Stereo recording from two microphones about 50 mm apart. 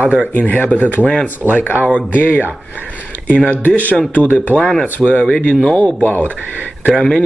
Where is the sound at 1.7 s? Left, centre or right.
Right.